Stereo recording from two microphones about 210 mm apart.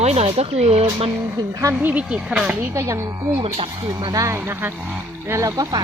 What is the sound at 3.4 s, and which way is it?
Speech, 25° right (ahead or behind).